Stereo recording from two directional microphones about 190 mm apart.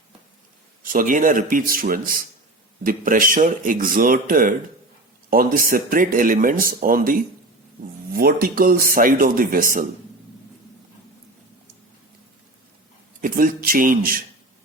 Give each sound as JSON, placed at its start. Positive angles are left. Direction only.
{"t": 0.9, "sound": "speech", "side_deg": -45}
{"t": 13.2, "sound": "speech", "side_deg": -45}